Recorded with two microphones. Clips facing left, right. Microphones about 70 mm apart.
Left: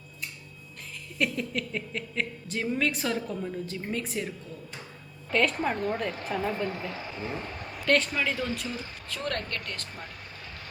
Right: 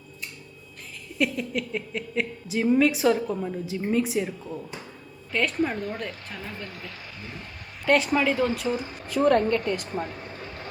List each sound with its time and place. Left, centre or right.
1.2 s a woman's voice: centre
6.7 s speech: left
7.9 s a woman's voice: centre
8.1 s speech: right
9.0 s a woman's voice: centre
9.9 s vehicle: right